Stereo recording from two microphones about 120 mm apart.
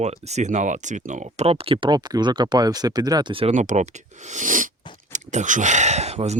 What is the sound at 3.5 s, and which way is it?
Speech, 85° right.